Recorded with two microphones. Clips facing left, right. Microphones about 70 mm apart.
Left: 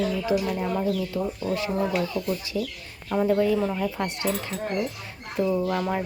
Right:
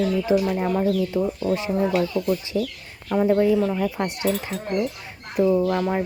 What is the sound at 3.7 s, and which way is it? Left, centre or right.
Speech, centre.